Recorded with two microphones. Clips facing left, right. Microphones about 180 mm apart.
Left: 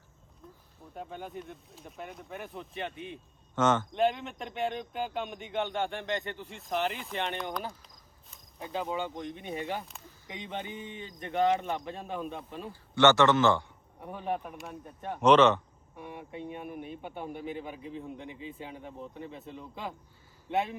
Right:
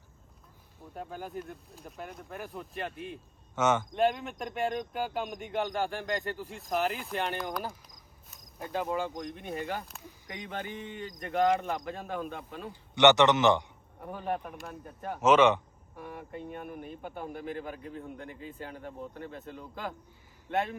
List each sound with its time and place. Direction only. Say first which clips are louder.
0.9 s speech: right 1 dB; centre (ahead or behind)
12.9 s a man's voice: right 1 dB; 20° right (ahead or behind)
14.0 s speech: even; centre (ahead or behind)
16.0 s speech: even; centre (ahead or behind)